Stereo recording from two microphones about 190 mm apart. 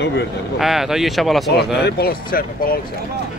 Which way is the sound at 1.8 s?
55° left (ahead or behind).